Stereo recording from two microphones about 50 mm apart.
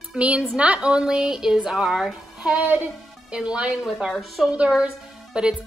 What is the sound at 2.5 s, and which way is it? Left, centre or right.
Speech, right.